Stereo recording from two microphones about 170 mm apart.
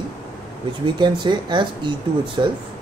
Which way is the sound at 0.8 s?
25° right (ahead or behind).